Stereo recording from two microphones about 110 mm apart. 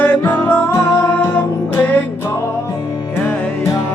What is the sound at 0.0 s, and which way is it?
Music, 15° left (ahead or behind).